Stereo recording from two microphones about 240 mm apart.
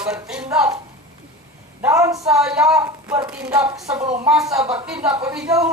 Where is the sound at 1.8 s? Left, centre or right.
Centre.